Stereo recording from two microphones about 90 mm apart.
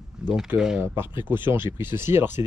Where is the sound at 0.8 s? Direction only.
25° right (ahead or behind).